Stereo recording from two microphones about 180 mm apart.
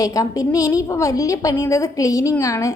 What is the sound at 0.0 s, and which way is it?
A woman's voice, 20° left (ahead or behind).